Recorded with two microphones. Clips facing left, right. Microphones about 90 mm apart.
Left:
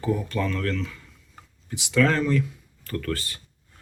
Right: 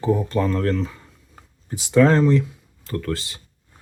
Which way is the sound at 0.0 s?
30° right (ahead or behind).